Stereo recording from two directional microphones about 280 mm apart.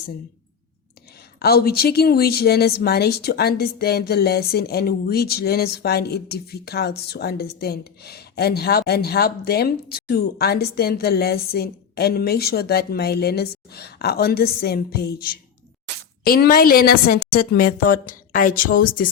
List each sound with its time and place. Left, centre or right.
1.4 s speech: left